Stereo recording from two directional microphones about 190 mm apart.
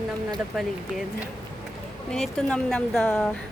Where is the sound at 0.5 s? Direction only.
Centre (ahead or behind).